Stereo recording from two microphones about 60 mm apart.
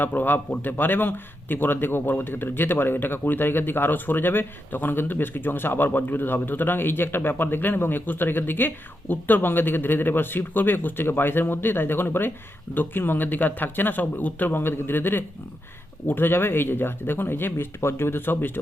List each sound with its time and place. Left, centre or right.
0.0 s a man's voice: left